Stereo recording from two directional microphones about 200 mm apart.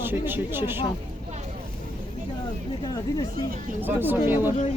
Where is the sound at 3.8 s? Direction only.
10° right (ahead or behind).